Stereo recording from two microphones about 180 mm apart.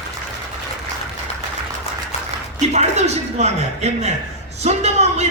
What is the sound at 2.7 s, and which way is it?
A man's voice, 40° right (ahead or behind).